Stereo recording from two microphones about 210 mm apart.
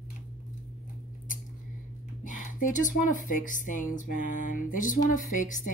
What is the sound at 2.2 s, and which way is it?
Speech, 40° left (ahead or behind).